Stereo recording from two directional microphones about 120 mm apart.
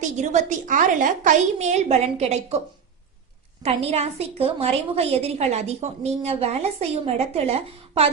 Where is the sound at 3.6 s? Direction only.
55° right (ahead or behind).